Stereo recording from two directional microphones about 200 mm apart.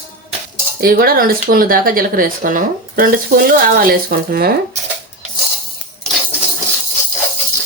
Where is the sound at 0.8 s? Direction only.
45° right (ahead or behind).